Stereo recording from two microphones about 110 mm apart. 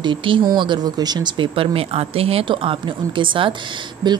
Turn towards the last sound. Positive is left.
turn(degrees=-40)  # may be behind; listen again after turning